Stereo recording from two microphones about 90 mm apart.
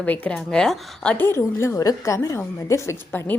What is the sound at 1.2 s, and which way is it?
A woman's voice, 30° left (ahead or behind).